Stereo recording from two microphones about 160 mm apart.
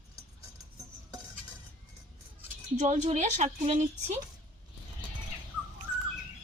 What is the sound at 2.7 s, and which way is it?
Speech, 45° right (ahead or behind).